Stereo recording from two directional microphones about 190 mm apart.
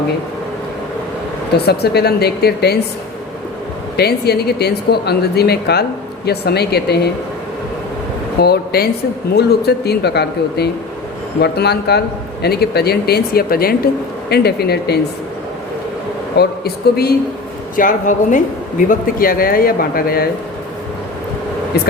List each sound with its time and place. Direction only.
1.5 s a man's voice: 60° left (ahead or behind)
3.9 s a man's voice: 60° left (ahead or behind)
8.4 s a man's voice: 55° left (ahead or behind)
16.4 s a man's voice: 55° left (ahead or behind)
17.7 s speech: 45° left (ahead or behind)